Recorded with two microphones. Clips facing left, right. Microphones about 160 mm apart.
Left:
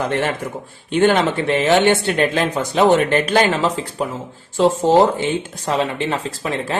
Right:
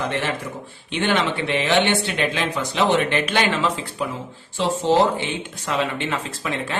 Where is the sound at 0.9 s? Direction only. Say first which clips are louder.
Left 6 dB; 40° left (ahead or behind).